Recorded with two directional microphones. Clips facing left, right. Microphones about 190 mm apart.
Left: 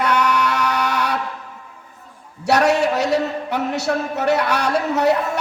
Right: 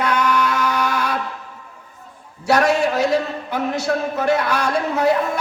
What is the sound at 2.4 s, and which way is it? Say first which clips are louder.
A man's voice: even; 70° left (ahead or behind).